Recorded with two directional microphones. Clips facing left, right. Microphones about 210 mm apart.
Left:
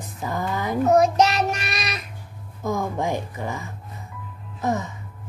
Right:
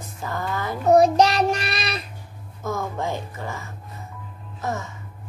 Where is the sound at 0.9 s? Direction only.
35° right (ahead or behind).